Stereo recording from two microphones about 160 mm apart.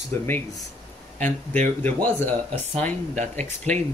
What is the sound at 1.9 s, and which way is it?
Speech, 10° left (ahead or behind).